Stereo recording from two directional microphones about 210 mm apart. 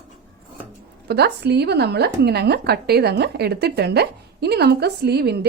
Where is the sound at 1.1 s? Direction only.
50° right (ahead or behind).